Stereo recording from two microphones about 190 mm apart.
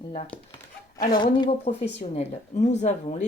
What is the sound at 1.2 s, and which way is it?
A woman's voice, 25° left (ahead or behind).